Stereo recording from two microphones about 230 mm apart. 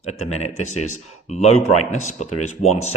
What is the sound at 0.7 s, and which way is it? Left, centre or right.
Speech, left.